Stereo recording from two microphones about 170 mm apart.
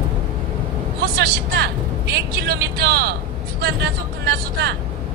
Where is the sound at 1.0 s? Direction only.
65° right (ahead or behind).